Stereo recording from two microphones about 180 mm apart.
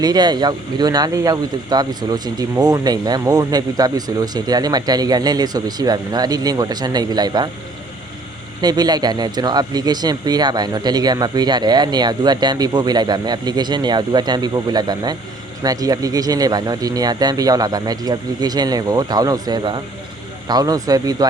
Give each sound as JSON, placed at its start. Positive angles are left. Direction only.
{"t": 0.0, "sound": "speech", "side_deg": -20}
{"t": 8.6, "sound": "speech", "side_deg": -20}